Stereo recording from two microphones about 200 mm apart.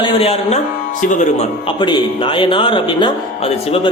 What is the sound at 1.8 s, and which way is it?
A man's voice, 25° left (ahead or behind).